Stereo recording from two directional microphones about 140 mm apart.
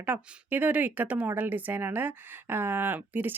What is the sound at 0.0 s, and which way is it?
Speech, 10° right (ahead or behind).